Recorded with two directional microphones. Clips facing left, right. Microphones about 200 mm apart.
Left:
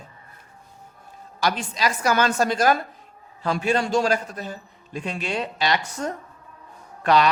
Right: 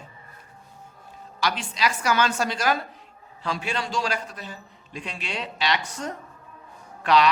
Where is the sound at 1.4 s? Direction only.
45° left (ahead or behind).